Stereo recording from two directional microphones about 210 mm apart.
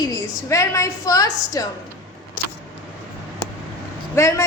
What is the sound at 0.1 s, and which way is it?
A woman's voice, 15° left (ahead or behind).